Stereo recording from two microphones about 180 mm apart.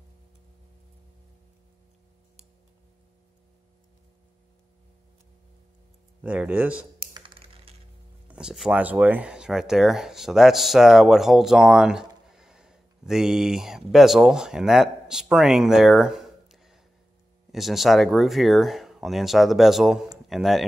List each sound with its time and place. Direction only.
6.2 s speech: 10° right (ahead or behind)
7.2 s typing: 30° right (ahead or behind)
8.3 s speech: 5° right (ahead or behind)